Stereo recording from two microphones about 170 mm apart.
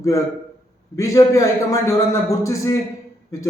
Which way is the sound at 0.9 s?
20° left (ahead or behind).